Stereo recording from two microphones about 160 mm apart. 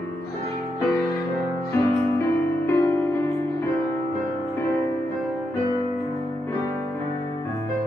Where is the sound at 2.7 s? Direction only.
15° left (ahead or behind).